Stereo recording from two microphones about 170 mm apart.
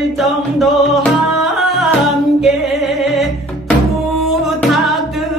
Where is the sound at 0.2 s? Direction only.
Centre (ahead or behind).